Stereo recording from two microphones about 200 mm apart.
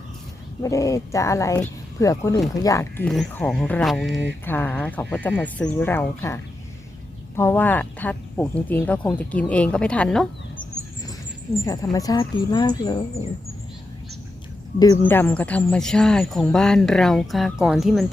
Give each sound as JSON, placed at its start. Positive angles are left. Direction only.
{"t": 0.6, "sound": "speech", "side_deg": 15}
{"t": 3.1, "sound": "speech", "side_deg": 5}
{"t": 11.6, "sound": "speech", "side_deg": 15}
{"t": 14.8, "sound": "speech", "side_deg": 15}